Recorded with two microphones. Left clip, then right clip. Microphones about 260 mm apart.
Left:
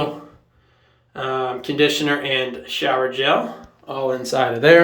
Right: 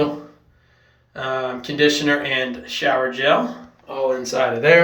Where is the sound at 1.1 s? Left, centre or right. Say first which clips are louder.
Left 1 dB; centre.